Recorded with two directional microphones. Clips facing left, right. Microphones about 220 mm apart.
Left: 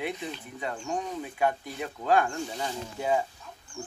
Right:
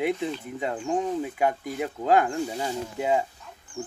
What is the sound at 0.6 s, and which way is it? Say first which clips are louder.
Speech: right 5 dB; 25° right (ahead or behind).